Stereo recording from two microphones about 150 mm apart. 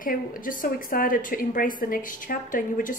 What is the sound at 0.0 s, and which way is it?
A woman's voice, 70° left (ahead or behind).